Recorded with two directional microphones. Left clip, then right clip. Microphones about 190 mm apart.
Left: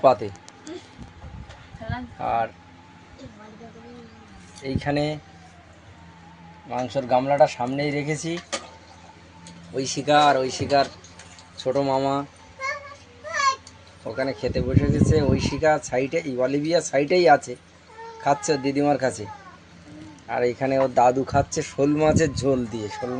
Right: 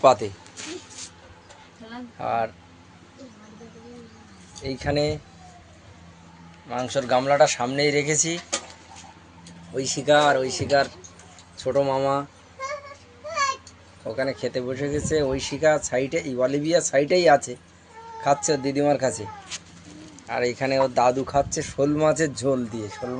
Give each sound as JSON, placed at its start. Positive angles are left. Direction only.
{"t": 0.0, "sound": "speech", "side_deg": 10}
{"t": 2.1, "sound": "speech", "side_deg": 15}
{"t": 4.6, "sound": "speech", "side_deg": 10}
{"t": 6.7, "sound": "speech", "side_deg": 10}
{"t": 9.7, "sound": "speech", "side_deg": 10}
{"t": 14.1, "sound": "speech", "side_deg": 10}
{"t": 20.2, "sound": "speech", "side_deg": 25}